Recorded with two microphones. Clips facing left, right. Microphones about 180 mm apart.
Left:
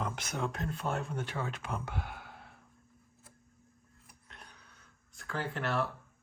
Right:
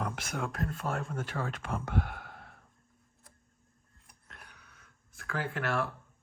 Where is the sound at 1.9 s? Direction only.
Centre (ahead or behind).